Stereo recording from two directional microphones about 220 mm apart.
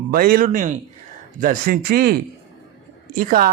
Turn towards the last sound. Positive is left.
turn(degrees=-40)  # may be behind; listen again after turning